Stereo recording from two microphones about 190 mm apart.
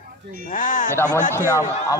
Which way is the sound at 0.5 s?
45° left (ahead or behind).